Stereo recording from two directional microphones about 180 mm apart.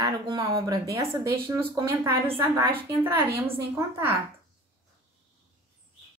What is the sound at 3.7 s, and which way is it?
Speech, 15° right (ahead or behind).